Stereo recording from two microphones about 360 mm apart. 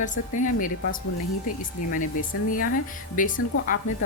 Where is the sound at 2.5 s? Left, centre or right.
Left.